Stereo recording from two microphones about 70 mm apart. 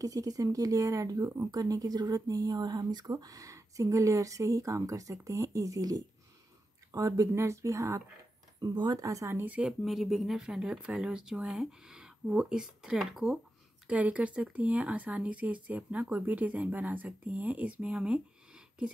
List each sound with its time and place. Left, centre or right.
0.0 s speech: right
7.3 s speech: right
8.5 s speech: right
9.0 s speech: right
9.7 s speech: centre
13.8 s speech: centre